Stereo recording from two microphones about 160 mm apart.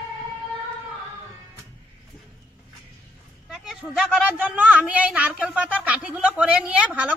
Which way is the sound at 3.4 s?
5° right (ahead or behind).